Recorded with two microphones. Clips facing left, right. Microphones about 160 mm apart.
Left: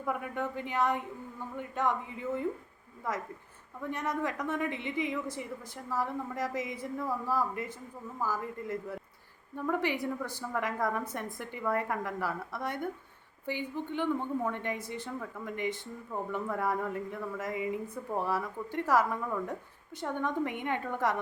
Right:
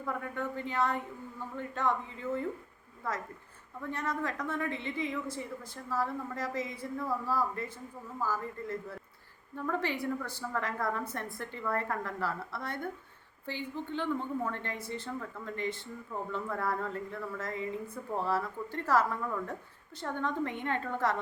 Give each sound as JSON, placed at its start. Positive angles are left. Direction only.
{"t": 0.0, "sound": "a woman's voice", "side_deg": 15}